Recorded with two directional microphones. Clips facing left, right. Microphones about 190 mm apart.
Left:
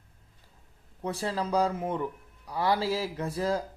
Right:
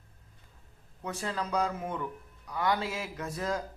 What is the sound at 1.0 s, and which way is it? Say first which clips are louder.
Speech: left 4 dB; 30° left (ahead or behind).